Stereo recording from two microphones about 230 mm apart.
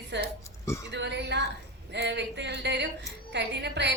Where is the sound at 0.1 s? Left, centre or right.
Right.